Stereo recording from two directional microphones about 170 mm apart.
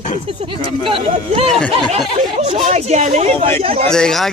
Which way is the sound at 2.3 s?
40° right (ahead or behind).